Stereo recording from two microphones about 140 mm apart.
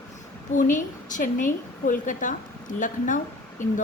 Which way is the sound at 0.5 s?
65° left (ahead or behind).